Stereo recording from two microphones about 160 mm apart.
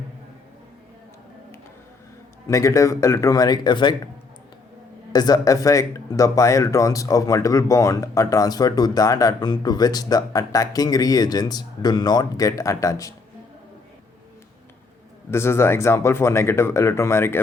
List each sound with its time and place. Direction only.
2.5 s speech: 20° left (ahead or behind)
5.1 s speech: 25° left (ahead or behind)
15.3 s speech: 15° left (ahead or behind)